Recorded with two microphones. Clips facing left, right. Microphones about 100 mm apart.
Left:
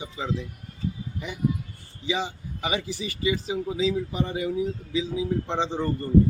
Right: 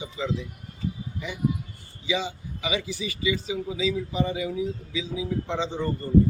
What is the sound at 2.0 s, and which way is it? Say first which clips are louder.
Speech: even; 45° left (ahead or behind).